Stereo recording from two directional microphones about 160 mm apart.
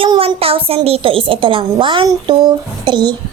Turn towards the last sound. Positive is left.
turn(degrees=-25)  # may be behind; listen again after turning